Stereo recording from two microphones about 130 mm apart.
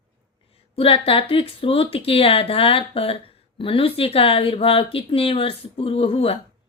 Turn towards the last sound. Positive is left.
turn(degrees=50)  # may be behind; listen again after turning